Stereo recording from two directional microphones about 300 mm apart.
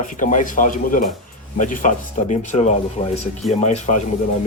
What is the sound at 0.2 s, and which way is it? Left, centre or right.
Speech, left.